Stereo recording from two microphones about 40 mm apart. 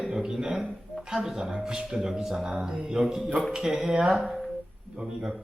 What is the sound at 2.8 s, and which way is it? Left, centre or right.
Music, centre.